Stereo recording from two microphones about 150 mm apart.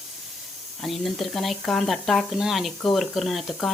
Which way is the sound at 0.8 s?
Centre (ahead or behind).